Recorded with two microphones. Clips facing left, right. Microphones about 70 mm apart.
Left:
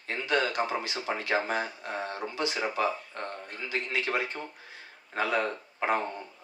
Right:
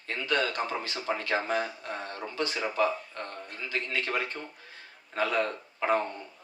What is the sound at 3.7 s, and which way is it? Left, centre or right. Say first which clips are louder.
Speech: left 1 dB; centre.